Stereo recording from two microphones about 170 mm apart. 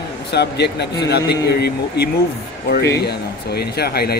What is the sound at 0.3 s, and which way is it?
Speech, 75° left (ahead or behind).